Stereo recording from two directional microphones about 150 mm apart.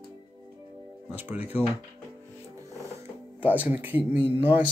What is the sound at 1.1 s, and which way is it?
Speech, 10° right (ahead or behind).